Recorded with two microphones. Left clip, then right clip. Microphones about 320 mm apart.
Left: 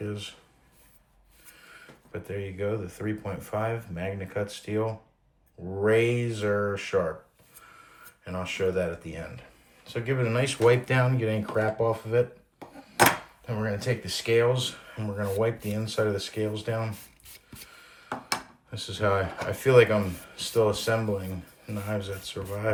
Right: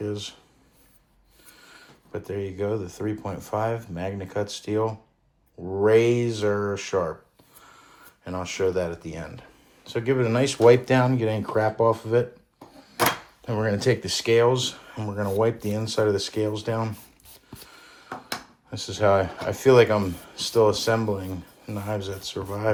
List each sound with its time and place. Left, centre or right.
0.0 s speech: centre
1.7 s speech: centre
8.2 s speech: centre
13.4 s speech: right
17.7 s a sound: right
18.7 s speech: centre